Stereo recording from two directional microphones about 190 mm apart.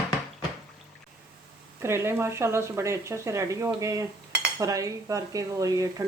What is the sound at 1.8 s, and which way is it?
Speech, 15° right (ahead or behind).